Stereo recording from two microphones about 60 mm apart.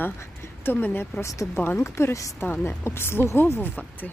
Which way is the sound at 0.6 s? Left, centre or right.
Left.